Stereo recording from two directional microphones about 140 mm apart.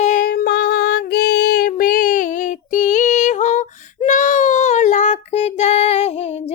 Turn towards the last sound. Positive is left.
turn(degrees=50)  # may be behind; listen again after turning